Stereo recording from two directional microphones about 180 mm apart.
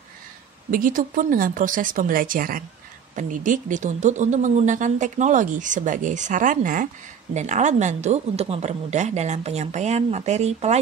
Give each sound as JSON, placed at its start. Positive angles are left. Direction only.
{"t": 0.7, "sound": "a woman's voice", "side_deg": -50}